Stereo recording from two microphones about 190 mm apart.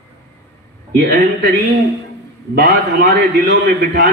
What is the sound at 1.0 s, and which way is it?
A man's voice, 60° right (ahead or behind).